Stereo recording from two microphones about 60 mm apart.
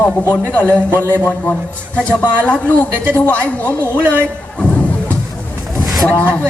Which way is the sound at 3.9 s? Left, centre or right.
Right.